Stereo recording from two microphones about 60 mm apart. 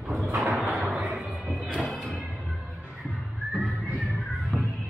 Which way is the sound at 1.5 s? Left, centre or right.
Centre.